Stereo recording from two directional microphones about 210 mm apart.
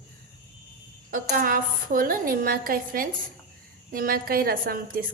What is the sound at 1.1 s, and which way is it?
A woman's voice, 40° right (ahead or behind).